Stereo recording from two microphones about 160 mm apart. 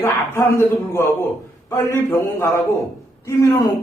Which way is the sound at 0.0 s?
15° left (ahead or behind).